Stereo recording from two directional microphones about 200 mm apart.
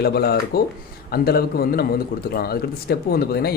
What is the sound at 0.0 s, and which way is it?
A man's voice, 50° left (ahead or behind).